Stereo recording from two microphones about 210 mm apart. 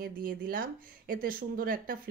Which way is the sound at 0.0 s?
40° right (ahead or behind).